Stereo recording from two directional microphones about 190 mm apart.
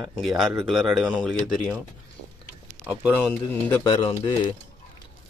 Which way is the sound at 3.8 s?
20° left (ahead or behind).